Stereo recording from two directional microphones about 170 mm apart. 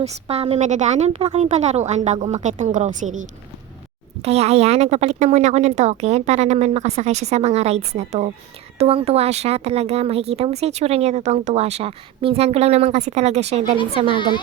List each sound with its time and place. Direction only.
0.0 s speech: 40° right (ahead or behind)
14.1 s a woman's voice: 30° left (ahead or behind)